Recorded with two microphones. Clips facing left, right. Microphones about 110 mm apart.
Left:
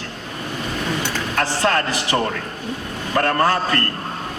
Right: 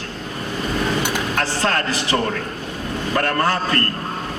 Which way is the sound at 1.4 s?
30° left (ahead or behind).